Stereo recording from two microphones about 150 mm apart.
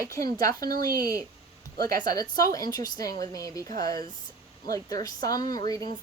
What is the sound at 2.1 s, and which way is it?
Speech, 25° left (ahead or behind).